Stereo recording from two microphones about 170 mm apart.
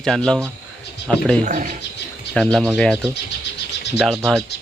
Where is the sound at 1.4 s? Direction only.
50° right (ahead or behind).